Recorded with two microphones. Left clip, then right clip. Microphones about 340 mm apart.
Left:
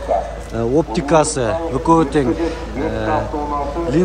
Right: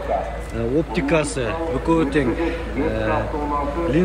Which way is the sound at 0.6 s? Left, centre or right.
Centre.